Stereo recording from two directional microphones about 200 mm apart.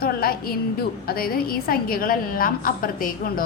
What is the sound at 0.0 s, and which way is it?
A woman's voice, 45° left (ahead or behind).